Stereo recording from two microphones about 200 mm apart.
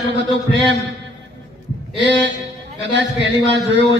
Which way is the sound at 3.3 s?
60° right (ahead or behind).